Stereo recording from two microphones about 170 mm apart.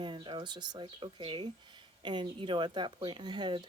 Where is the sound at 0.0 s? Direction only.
30° right (ahead or behind).